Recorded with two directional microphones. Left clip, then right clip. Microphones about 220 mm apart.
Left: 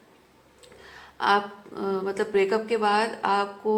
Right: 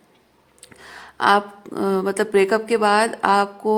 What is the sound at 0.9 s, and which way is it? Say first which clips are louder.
Speech: right 6 dB; 50° right (ahead or behind).